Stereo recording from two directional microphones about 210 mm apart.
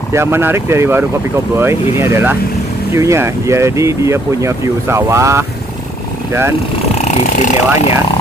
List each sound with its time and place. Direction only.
0.1 s speech: 10° right (ahead or behind)
7.1 s speech: 35° left (ahead or behind)